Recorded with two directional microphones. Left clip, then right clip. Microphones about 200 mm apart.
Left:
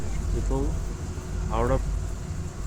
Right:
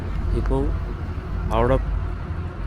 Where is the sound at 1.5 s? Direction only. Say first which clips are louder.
Right 6 dB; 20° right (ahead or behind).